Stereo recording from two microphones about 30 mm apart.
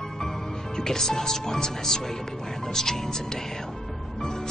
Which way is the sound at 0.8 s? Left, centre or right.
Centre.